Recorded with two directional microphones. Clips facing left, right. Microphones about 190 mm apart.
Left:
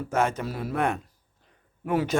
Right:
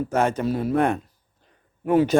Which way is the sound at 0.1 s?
35° right (ahead or behind).